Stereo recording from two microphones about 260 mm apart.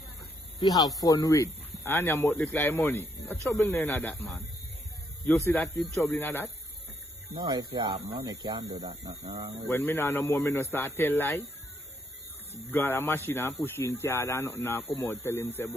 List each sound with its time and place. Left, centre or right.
0.6 s speech: centre
5.5 s speech: centre
7.3 s speech: centre
9.6 s speech: centre
12.7 s speech: centre